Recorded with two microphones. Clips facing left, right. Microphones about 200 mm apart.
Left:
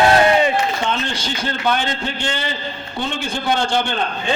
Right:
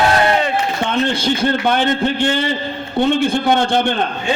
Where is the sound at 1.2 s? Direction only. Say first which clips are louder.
Right 8 dB; 55° right (ahead or behind).